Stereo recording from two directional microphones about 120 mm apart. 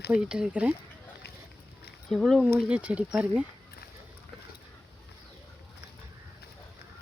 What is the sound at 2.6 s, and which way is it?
Speech, 10° right (ahead or behind).